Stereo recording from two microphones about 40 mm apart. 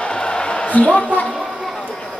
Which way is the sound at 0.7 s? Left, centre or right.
Left.